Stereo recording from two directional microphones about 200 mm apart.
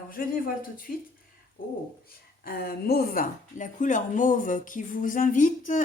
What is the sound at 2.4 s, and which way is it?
Speech, 45° left (ahead or behind).